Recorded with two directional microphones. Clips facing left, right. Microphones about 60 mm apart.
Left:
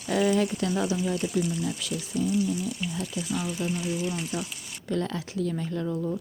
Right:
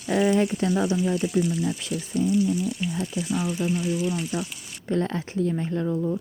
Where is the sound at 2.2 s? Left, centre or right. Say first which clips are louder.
Right 4 dB; right.